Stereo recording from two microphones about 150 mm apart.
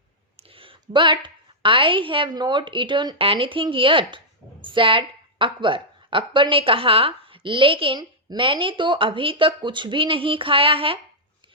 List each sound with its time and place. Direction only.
0.3 s a woman's voice: 40° right (ahead or behind)